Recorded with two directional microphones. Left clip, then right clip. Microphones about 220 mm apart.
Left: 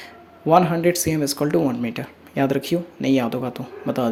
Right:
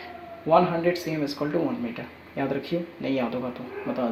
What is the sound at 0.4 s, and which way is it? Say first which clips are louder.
Speech: left 4 dB; 55° left (ahead or behind).